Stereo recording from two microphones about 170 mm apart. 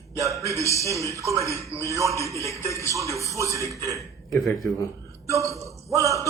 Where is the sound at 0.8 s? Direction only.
20° left (ahead or behind).